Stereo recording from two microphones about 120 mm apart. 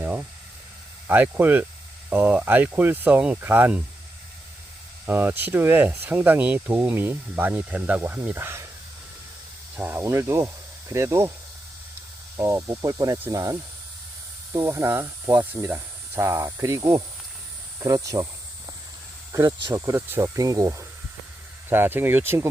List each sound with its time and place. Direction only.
0.0 s a sound: 20° right (ahead or behind)
1.0 s speech: 15° right (ahead or behind)
5.0 s speech: 15° right (ahead or behind)
9.7 s speech: 15° right (ahead or behind)
12.4 s speech: 25° right (ahead or behind)
19.3 s speech: 30° right (ahead or behind)